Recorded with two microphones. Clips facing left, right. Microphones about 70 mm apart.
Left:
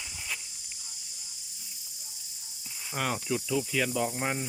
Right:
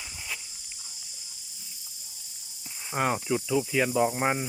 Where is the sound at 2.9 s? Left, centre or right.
Right.